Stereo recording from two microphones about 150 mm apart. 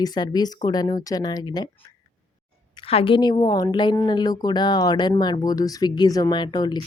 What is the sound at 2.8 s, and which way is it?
Speech, 40° left (ahead or behind).